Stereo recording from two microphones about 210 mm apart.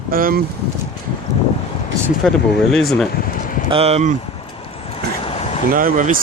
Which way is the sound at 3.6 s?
25° right (ahead or behind).